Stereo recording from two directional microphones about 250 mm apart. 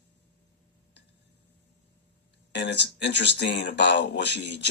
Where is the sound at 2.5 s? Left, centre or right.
Left.